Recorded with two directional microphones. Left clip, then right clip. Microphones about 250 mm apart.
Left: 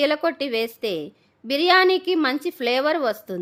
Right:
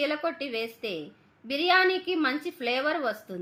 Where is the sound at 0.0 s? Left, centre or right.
Left.